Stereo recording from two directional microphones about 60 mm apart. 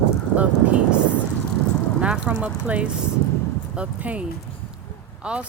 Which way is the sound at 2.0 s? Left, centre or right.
Right.